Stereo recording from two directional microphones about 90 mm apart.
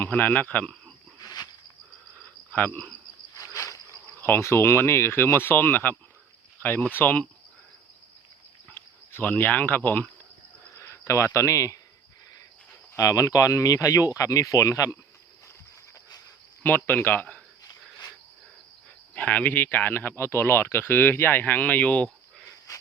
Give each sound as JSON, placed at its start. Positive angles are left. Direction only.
{"t": 0.0, "sound": "speech", "side_deg": 20}
{"t": 1.2, "sound": "cricket", "side_deg": 50}
{"t": 2.5, "sound": "cricket", "side_deg": 15}
{"t": 3.3, "sound": "a sound", "side_deg": 35}
{"t": 4.2, "sound": "speech", "side_deg": 25}
{"t": 8.7, "sound": "speech", "side_deg": 20}
{"t": 10.8, "sound": "a sound", "side_deg": 30}
{"t": 11.3, "sound": "speech", "side_deg": 35}
{"t": 12.9, "sound": "speech", "side_deg": 40}
{"t": 16.6, "sound": "speech", "side_deg": 20}
{"t": 19.1, "sound": "speech", "side_deg": 15}